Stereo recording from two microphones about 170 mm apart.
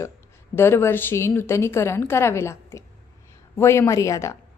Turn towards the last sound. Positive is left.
turn(degrees=20)  # may be behind; listen again after turning